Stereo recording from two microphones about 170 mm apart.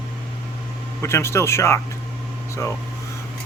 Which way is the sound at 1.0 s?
15° left (ahead or behind).